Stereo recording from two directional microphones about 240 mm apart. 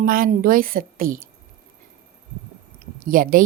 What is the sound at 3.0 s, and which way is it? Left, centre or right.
Speech, right.